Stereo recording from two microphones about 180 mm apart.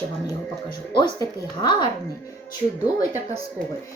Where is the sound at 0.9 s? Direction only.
25° left (ahead or behind).